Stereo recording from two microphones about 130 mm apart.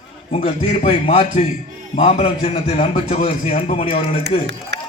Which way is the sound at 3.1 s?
55° left (ahead or behind).